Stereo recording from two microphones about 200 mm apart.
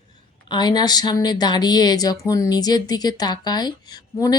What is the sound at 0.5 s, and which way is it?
A woman's voice, 20° left (ahead or behind).